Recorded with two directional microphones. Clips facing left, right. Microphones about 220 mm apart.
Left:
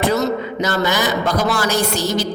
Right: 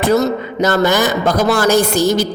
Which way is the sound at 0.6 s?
50° right (ahead or behind).